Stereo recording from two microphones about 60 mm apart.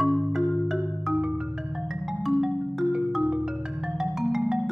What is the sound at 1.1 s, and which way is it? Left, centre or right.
Music, centre.